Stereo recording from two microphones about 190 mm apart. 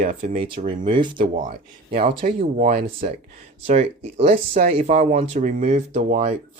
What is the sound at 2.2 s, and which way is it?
Speech, 40° right (ahead or behind).